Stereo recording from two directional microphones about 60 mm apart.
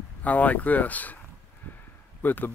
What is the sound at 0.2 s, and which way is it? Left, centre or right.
Speech, left.